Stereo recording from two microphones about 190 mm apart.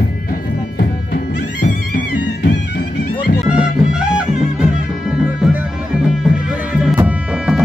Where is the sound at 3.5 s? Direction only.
5° right (ahead or behind).